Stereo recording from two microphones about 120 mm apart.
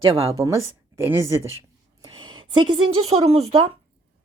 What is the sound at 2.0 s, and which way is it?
A woman's voice, 40° right (ahead or behind).